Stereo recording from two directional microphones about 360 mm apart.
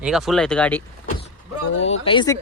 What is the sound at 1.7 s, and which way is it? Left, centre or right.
Speech, left.